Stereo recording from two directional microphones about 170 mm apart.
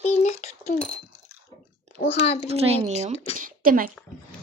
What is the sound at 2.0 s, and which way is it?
Speech, 40° left (ahead or behind).